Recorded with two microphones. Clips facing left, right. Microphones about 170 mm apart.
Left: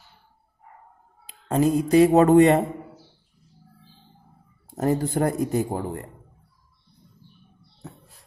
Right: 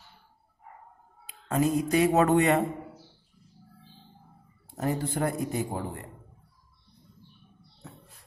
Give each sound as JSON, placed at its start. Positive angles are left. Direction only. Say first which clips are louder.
{"t": 1.2, "sound": "speech", "louder": "left 5 dB", "side_deg": 30}
{"t": 4.6, "sound": "a man's voice", "louder": "left 6 dB", "side_deg": 45}